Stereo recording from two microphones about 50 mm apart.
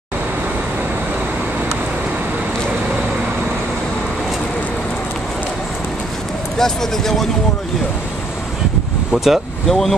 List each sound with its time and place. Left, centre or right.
6.6 s speech: centre
9.1 s speech: centre
9.7 s speech: centre